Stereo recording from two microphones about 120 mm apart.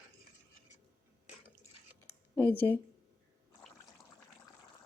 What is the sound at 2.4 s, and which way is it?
Speech, 15° left (ahead or behind).